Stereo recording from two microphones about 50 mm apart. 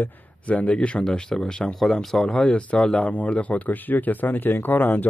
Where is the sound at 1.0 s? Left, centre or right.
Centre.